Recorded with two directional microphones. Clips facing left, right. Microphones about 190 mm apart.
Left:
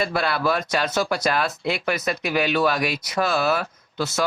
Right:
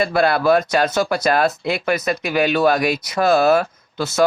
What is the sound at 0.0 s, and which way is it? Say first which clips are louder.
Speech: right 6 dB; 50° right (ahead or behind).